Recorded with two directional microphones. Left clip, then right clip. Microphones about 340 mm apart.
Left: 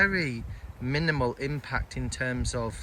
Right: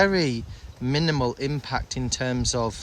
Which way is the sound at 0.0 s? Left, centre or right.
Centre.